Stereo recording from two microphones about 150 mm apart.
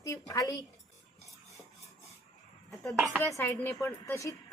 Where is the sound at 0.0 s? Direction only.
25° left (ahead or behind).